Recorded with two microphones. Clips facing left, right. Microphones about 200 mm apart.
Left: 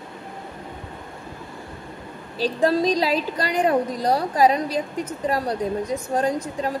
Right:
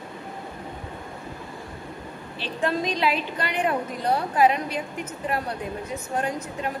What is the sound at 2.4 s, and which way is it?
A woman's voice, 35° left (ahead or behind).